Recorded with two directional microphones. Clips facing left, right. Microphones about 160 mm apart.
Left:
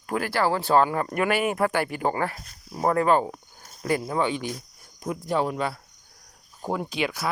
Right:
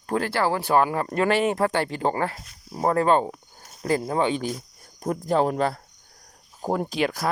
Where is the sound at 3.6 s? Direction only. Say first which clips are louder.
Right 2 dB; 35° right (ahead or behind).